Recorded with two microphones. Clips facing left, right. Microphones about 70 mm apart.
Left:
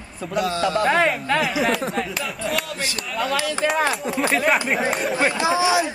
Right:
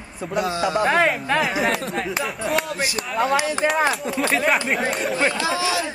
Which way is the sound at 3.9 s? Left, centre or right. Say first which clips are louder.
Even; centre.